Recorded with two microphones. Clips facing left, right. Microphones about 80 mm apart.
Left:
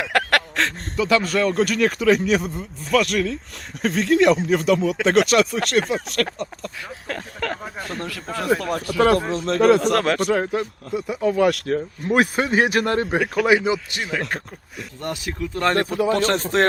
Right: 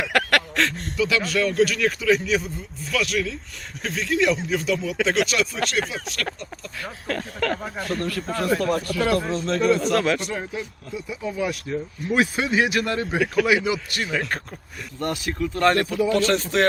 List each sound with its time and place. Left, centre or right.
0.0 s speech: left
7.1 s speech: left
8.0 s speech: centre
9.3 s speech: left
12.0 s speech: left
14.0 s speech: centre
15.0 s speech: centre
15.7 s speech: left